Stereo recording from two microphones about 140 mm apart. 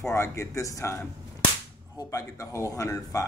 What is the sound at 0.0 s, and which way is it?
Whip, 20° left (ahead or behind).